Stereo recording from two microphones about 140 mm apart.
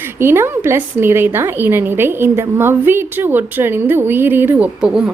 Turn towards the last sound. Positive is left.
turn(degrees=-10)  # may be behind; listen again after turning